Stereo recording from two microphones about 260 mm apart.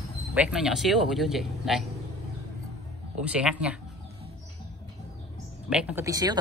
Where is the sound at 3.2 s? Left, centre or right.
Centre.